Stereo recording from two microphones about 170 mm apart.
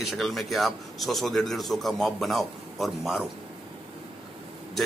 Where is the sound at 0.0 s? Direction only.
Centre (ahead or behind).